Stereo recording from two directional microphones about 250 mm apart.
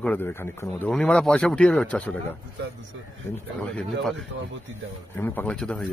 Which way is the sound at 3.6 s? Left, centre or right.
Centre.